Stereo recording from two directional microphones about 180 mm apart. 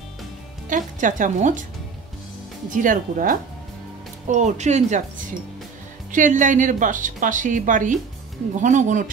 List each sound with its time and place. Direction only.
0.7 s a woman's voice: 45° right (ahead or behind)
2.7 s a woman's voice: 45° right (ahead or behind)
6.1 s a woman's voice: 45° right (ahead or behind)